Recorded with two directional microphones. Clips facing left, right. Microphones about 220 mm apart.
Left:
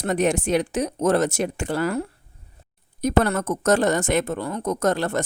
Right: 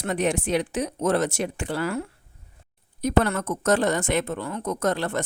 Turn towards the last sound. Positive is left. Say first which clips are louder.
# left 3 dB
turn(degrees=45)  # may be behind; listen again after turning